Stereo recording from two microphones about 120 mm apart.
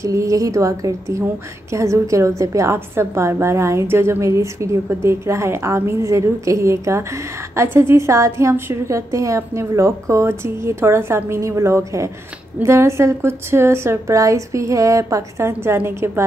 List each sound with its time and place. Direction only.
0.0 s a woman's voice: 25° right (ahead or behind)